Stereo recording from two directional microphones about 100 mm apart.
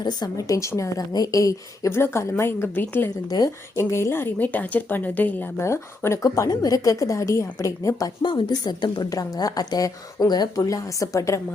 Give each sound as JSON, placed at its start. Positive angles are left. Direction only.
{"t": 0.0, "sound": "a woman's voice", "side_deg": 40}
{"t": 8.2, "sound": "a woman's voice", "side_deg": 50}